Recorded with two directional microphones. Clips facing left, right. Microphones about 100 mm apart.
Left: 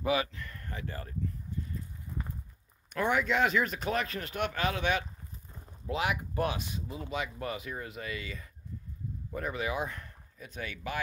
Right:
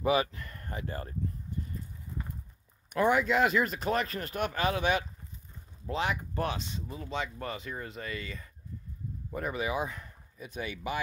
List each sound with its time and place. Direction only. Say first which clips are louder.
0.0 s speech: right 3 dB; 35° right (ahead or behind)
2.9 s speech: right 3 dB; 5° right (ahead or behind)
5.9 s speech: even; 10° left (ahead or behind); by 11.0 s 15° right (ahead or behind)